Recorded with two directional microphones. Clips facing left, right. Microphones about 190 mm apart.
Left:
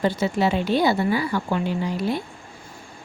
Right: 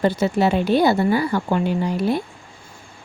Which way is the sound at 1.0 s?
45° right (ahead or behind).